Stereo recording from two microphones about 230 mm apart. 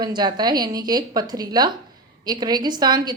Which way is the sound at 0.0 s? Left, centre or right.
Centre.